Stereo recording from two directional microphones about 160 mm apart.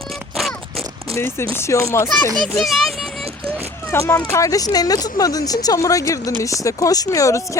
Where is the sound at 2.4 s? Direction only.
Centre (ahead or behind).